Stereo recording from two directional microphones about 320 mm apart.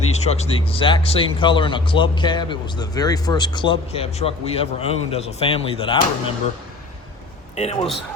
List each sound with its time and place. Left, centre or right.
0.1 s speech: centre
7.5 s a man's voice: centre